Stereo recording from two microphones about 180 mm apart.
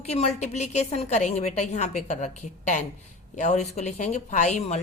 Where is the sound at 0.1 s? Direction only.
40° left (ahead or behind).